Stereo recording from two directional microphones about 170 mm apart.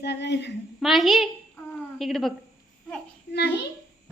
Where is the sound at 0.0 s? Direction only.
85° left.